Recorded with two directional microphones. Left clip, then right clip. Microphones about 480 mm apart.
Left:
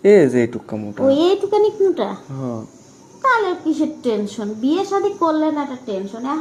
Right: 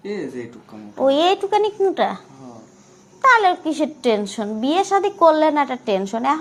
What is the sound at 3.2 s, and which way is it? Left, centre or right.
A woman's voice, right.